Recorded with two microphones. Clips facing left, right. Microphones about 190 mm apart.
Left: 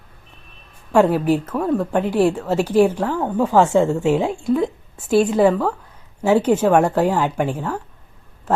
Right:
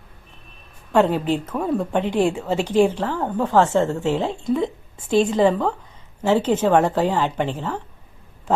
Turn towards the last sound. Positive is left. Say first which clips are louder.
# left 2 dB
turn(degrees=10)  # may be behind; listen again after turning